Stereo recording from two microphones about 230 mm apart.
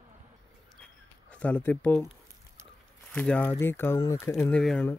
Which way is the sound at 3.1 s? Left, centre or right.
Centre.